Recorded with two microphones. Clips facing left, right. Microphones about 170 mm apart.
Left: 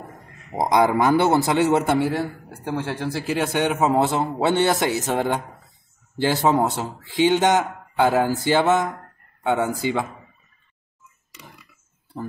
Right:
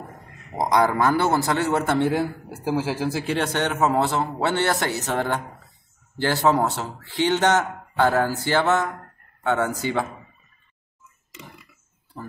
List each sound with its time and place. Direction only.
0.6 s a man's voice: 20° left (ahead or behind)
2.0 s speech: centre (ahead or behind); by 10.0 s 15° left (ahead or behind)